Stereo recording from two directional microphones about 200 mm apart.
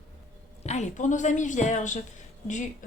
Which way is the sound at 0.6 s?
35° left (ahead or behind).